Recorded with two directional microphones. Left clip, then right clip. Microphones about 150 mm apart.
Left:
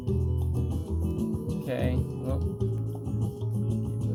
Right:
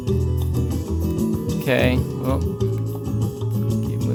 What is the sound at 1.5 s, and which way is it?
Speech, 45° right (ahead or behind).